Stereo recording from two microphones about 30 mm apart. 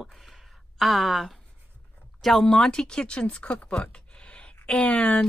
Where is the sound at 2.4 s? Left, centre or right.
Left.